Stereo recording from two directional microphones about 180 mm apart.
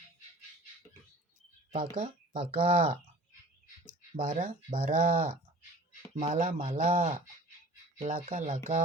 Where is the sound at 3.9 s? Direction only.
45° right (ahead or behind).